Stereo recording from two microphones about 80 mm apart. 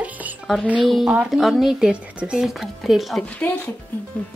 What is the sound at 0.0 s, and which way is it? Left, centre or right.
Music, centre.